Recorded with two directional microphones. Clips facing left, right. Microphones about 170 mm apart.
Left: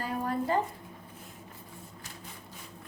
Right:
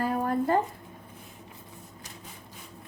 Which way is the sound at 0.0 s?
50° right (ahead or behind).